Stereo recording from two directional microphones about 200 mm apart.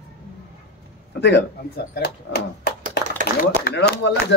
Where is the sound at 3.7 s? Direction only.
45° left (ahead or behind).